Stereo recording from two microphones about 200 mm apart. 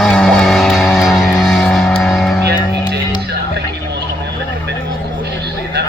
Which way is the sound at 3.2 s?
55° right (ahead or behind).